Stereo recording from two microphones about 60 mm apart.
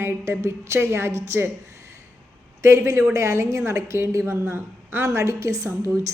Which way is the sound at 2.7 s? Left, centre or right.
Right.